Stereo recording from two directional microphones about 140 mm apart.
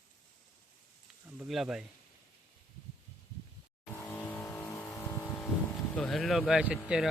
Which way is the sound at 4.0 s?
10° left (ahead or behind).